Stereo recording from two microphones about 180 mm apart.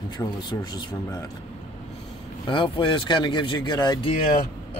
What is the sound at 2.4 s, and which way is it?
Speech, 25° left (ahead or behind).